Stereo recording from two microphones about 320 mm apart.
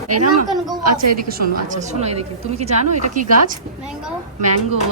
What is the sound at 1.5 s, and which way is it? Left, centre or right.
A woman's voice, right.